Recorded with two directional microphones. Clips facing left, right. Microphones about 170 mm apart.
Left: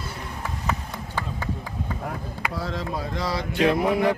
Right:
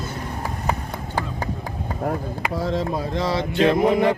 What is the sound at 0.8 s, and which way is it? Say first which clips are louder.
Run: right 4 dB; 40° right (ahead or behind).